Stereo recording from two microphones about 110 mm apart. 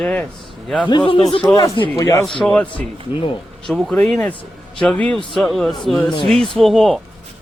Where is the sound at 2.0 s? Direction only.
25° left (ahead or behind).